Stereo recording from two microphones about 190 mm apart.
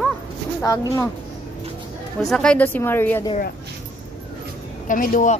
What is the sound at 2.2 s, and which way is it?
A woman's voice, 5° left (ahead or behind).